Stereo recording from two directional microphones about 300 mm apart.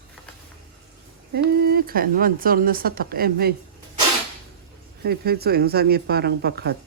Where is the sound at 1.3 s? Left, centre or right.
Right.